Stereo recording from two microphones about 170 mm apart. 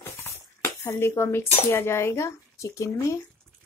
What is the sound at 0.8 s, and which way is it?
Speech, 15° left (ahead or behind).